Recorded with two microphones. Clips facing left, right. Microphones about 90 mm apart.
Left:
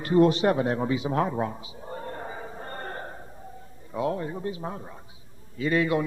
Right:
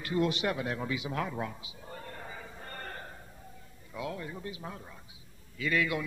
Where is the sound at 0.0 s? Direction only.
40° left (ahead or behind).